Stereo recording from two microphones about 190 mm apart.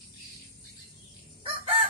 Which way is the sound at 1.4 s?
30° right (ahead or behind).